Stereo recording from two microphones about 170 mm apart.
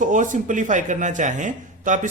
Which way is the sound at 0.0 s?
50° right (ahead or behind).